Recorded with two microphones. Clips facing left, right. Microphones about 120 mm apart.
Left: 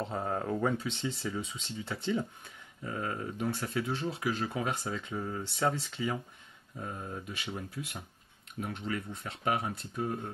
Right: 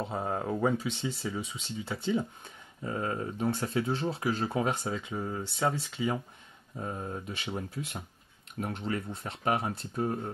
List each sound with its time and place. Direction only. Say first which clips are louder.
0.0 s speech: right 1 dB; 5° right (ahead or behind)
2.8 s speech: right 3 dB; 25° right (ahead or behind)
6.8 s speech: right 3 dB; 25° right (ahead or behind)